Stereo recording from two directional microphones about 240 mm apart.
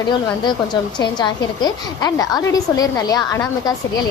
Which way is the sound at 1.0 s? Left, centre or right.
Centre.